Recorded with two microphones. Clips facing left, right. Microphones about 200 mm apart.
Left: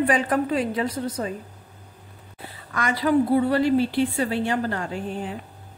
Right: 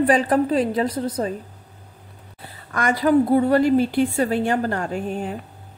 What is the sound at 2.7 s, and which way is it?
A woman's voice, 45° right (ahead or behind).